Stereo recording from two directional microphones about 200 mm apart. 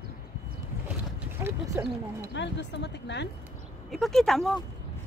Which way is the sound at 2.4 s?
60° left (ahead or behind).